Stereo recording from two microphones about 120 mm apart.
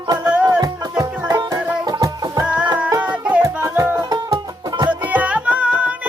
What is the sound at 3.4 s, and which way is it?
Music, 25° right (ahead or behind).